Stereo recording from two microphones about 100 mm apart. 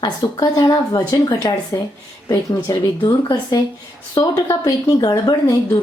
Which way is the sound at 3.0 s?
40° left (ahead or behind).